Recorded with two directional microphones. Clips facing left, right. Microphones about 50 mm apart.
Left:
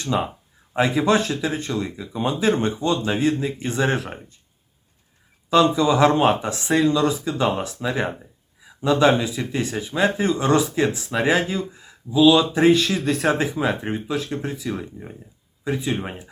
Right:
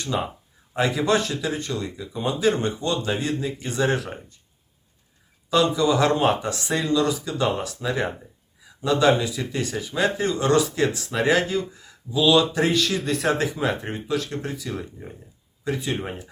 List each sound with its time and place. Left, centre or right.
0.1 s speech: left
5.5 s speech: left
7.8 s speech: centre
13.0 s speech: centre
13.4 s speech: centre